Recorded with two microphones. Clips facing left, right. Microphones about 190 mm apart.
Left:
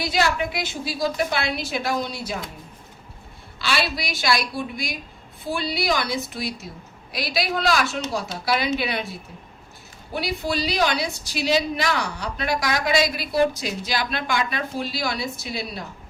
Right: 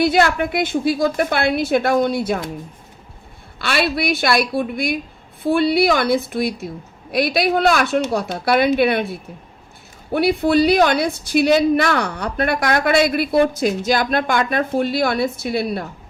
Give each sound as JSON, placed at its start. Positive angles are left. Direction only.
{"t": 0.0, "sound": "a woman's voice", "side_deg": -55}
{"t": 3.6, "sound": "a woman's voice", "side_deg": -55}